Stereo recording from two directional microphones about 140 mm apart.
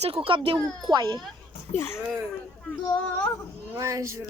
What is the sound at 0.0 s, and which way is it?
Speech, 40° right (ahead or behind).